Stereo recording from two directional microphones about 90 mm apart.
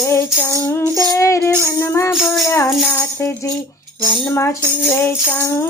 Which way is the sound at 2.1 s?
Centre (ahead or behind).